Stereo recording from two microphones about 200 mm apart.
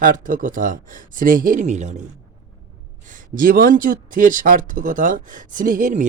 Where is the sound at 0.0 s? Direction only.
40° right (ahead or behind).